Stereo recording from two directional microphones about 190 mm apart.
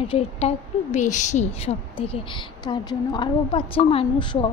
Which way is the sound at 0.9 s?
40° left (ahead or behind).